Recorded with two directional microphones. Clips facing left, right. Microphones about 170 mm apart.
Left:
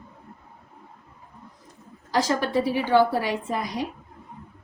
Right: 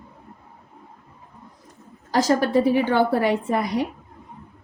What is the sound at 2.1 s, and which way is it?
A woman's voice, 45° right (ahead or behind).